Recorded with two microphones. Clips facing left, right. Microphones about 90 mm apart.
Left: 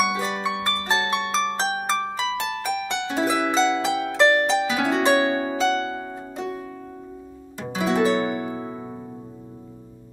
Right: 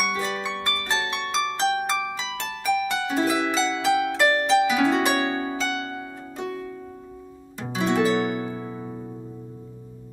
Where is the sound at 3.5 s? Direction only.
25° left (ahead or behind).